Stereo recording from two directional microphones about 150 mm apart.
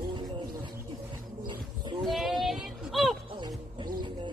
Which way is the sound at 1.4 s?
30° right (ahead or behind).